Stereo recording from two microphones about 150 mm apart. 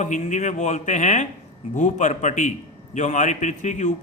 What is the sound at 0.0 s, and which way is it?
A man's voice, 55° left (ahead or behind).